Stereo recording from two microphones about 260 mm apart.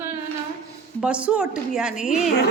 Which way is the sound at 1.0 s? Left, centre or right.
Centre.